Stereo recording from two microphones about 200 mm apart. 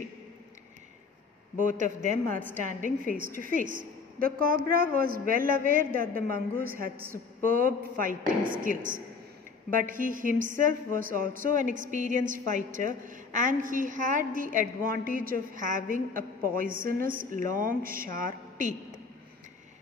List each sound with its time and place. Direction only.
1.6 s a woman's voice: 40° right (ahead or behind)